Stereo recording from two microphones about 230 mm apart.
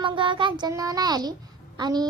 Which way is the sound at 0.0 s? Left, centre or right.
Right.